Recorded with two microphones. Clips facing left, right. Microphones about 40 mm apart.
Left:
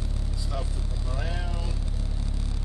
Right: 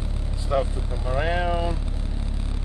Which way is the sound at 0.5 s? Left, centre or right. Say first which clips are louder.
Right 14 dB; right.